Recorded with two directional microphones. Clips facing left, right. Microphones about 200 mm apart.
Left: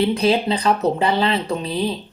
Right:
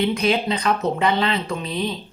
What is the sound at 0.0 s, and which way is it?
Speech, 30° left (ahead or behind).